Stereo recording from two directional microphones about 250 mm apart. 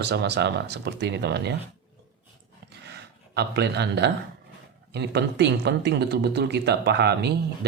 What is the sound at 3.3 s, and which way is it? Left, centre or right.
Speech, right.